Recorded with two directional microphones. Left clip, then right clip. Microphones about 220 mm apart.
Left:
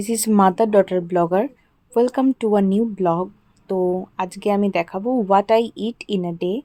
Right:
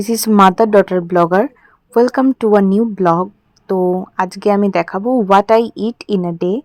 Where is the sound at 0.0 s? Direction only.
20° right (ahead or behind).